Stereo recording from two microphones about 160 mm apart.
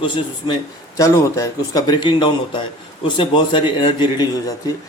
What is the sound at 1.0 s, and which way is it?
A man's voice, 20° left (ahead or behind).